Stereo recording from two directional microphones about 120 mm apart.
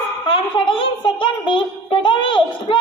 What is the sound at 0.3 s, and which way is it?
A child's voice, 45° left (ahead or behind).